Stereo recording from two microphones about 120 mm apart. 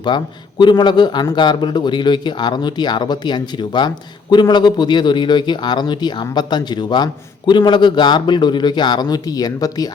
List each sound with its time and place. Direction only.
0.1 s a man's voice: 35° left (ahead or behind)